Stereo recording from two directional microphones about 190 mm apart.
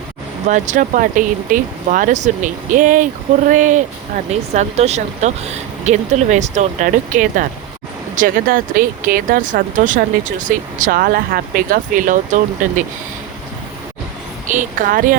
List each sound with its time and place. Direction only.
0.4 s speech: 40° right (ahead or behind)
14.4 s speech: 40° right (ahead or behind)